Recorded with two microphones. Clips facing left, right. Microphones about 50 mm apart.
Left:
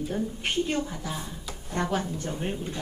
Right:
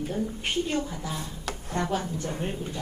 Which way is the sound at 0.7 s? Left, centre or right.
Left.